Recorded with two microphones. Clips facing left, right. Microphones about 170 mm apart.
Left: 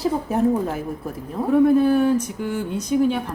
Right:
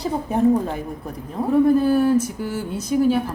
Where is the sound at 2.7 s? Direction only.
5° right (ahead or behind).